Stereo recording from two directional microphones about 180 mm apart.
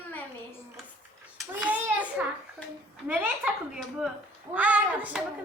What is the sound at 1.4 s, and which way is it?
Hands, 5° right (ahead or behind).